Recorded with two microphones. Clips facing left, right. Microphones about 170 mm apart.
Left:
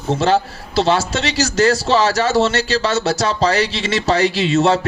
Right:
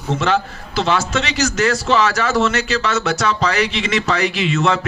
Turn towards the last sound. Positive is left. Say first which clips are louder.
# left 3 dB
turn(degrees=30)  # may be behind; listen again after turning